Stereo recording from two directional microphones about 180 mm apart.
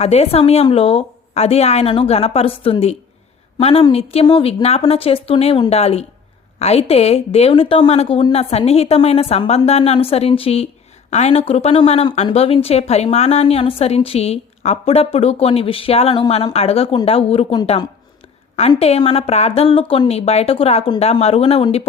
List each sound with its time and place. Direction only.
0.0 s a woman's voice: 35° left (ahead or behind)
18.7 s a woman's voice: 35° left (ahead or behind)